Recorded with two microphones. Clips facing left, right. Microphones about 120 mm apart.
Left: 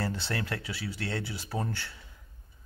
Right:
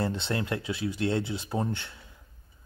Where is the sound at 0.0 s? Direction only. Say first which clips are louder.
Right 3 dB; 20° right (ahead or behind).